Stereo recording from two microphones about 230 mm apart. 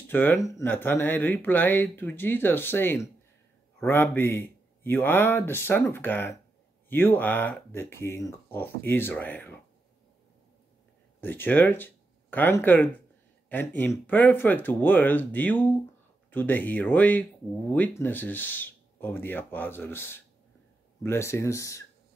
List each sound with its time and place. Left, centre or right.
0.1 s speech: centre
11.1 s speech: centre